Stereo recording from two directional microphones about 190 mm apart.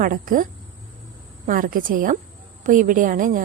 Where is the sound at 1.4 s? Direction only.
45° right (ahead or behind).